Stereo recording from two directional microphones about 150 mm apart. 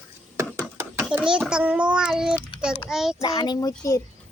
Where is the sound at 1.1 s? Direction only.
5° right (ahead or behind).